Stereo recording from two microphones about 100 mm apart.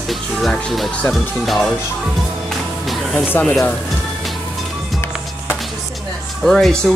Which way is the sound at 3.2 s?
20° left (ahead or behind).